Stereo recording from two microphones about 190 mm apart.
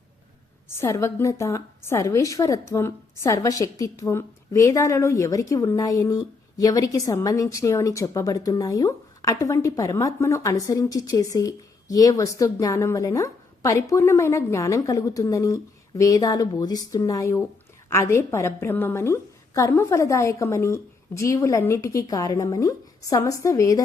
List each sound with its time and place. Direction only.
0.8 s a woman's voice: 15° left (ahead or behind)